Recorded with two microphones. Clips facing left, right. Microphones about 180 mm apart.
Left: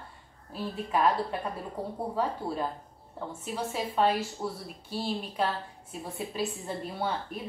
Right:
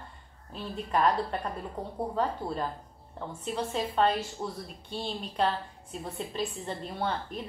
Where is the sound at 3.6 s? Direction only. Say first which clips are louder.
Even; 10° left (ahead or behind).